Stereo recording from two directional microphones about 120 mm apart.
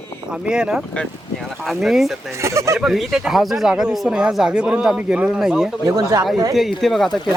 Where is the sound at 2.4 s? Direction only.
25° right (ahead or behind).